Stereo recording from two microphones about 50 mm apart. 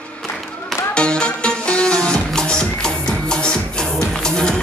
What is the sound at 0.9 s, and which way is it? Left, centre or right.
Music, left.